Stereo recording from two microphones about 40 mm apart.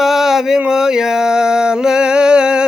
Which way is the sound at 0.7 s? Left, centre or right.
Centre.